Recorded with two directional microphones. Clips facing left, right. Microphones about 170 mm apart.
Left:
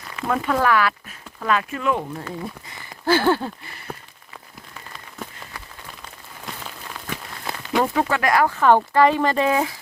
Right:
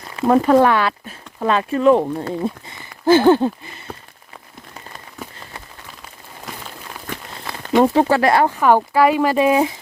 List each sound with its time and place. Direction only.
0.2 s speech: 35° right (ahead or behind); by 3.8 s 20° right (ahead or behind)
7.5 s a sound: 20° left (ahead or behind)
7.9 s speech: 30° right (ahead or behind)
8.4 s speech: 15° right (ahead or behind)